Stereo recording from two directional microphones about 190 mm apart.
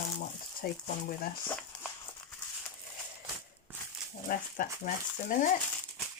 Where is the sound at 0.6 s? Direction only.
50° left (ahead or behind).